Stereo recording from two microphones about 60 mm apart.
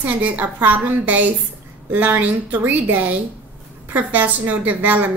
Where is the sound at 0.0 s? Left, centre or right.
Right.